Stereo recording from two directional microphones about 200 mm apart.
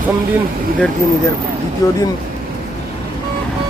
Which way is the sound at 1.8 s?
15° left (ahead or behind).